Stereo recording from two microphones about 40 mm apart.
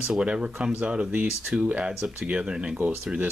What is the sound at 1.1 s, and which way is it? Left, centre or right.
Speech, right.